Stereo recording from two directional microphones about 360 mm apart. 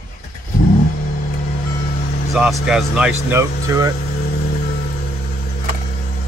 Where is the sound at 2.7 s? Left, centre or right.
Centre.